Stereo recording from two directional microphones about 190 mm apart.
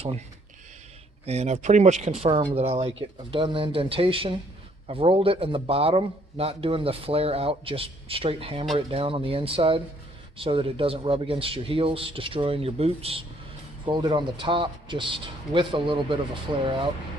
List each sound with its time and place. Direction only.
1.2 s a man's voice: 35° right (ahead or behind)